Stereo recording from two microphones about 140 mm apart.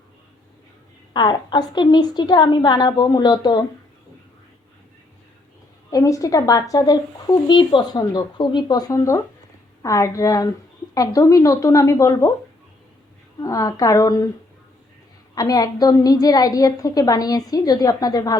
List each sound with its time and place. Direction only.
1.1 s a woman's voice: 35° left (ahead or behind)
5.9 s speech: 25° left (ahead or behind)
13.4 s speech: 25° left (ahead or behind)
15.4 s speech: 25° left (ahead or behind)